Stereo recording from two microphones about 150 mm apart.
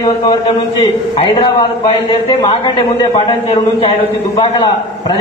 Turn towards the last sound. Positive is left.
turn(degrees=40)  # may be behind; listen again after turning